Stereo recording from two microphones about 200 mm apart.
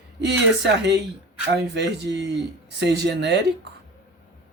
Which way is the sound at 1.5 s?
60° right (ahead or behind).